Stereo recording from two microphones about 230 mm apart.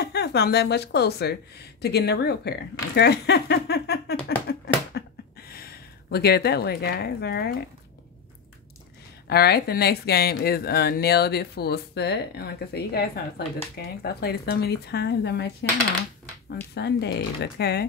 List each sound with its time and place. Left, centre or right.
0.0 s speech: left
4.3 s a sound: left
5.5 s a woman's voice: left
9.3 s speech: left
16.4 s speech: left